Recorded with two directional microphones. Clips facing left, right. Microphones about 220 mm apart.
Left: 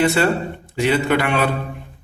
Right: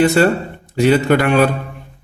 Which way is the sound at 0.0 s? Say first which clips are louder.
Right 4 dB; 45° right (ahead or behind).